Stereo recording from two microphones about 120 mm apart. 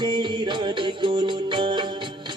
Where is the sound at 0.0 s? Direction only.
40° right (ahead or behind).